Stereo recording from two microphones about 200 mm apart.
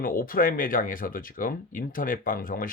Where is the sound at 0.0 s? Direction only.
45° left (ahead or behind).